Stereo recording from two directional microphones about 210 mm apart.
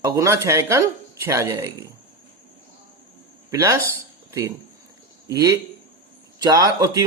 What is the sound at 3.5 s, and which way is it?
A man's voice, 15° right (ahead or behind).